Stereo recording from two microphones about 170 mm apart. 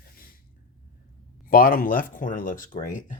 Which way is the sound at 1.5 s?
60° left (ahead or behind).